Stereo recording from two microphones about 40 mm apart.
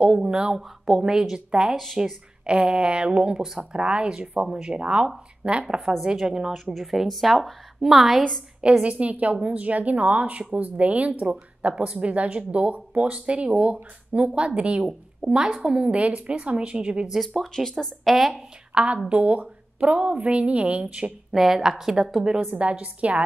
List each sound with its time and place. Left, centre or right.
0.0 s a woman's voice: right
0.6 s a woman's voice: centre
4.2 s a woman's voice: right
4.5 s a woman's voice: right
6.8 s a woman's voice: centre
8.5 s a woman's voice: right
17.3 s speech: centre
18.1 s a woman's voice: centre
18.7 s a woman's voice: right
21.3 s a woman's voice: centre
22.5 s a woman's voice: right